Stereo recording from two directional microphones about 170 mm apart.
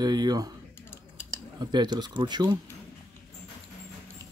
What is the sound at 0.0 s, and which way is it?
Speech, 25° right (ahead or behind).